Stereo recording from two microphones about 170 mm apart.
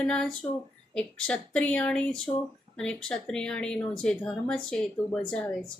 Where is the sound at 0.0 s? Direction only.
5° left (ahead or behind).